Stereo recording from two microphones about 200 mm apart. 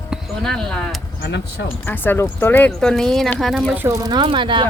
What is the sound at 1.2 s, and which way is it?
Speech, 60° left (ahead or behind).